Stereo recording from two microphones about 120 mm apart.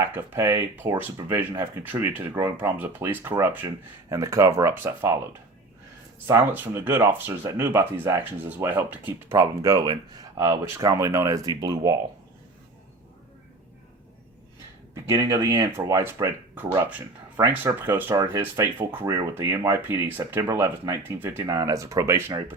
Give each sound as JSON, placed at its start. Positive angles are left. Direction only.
{"t": 0.0, "sound": "speech", "side_deg": -20}
{"t": 6.2, "sound": "speech", "side_deg": -20}
{"t": 15.0, "sound": "speech", "side_deg": -25}
{"t": 16.9, "sound": "speech", "side_deg": -15}
{"t": 18.1, "sound": "speech", "side_deg": -30}
{"t": 21.4, "sound": "speech", "side_deg": -30}